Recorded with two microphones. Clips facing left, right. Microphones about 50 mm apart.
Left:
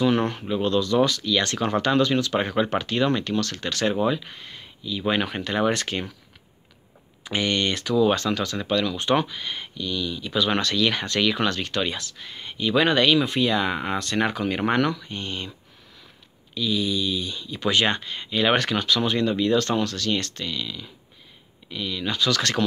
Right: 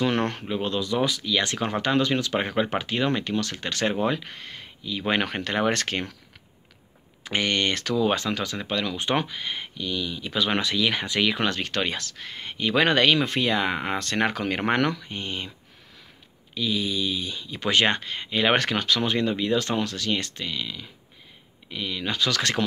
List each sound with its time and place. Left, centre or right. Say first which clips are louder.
0.0 s speech: left 3 dB; right
0.5 s speech: left 4 dB; right
4.0 s speech: left 2 dB; right
7.2 s speech: even; right
8.0 s speech: left 4 dB; right
10.6 s speech: left 1 dB; centre
11.3 s speech: left 1 dB; right
11.7 s speech: left 1 dB; right
15.0 s speech: even; right
16.5 s speech: left 2 dB; right